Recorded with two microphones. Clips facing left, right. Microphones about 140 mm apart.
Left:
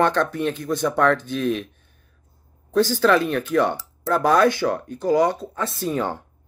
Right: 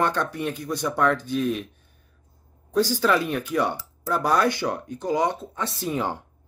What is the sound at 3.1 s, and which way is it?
Speech, 10° right (ahead or behind).